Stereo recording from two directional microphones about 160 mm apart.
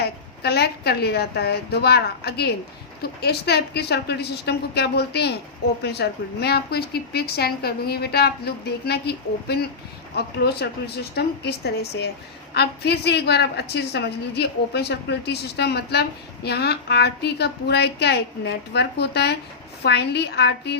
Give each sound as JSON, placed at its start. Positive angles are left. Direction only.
{"t": 0.0, "sound": "a woman's voice", "side_deg": 90}